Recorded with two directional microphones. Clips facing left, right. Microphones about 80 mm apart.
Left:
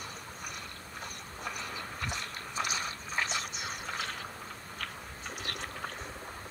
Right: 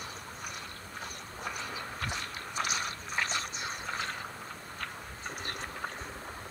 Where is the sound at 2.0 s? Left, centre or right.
Right.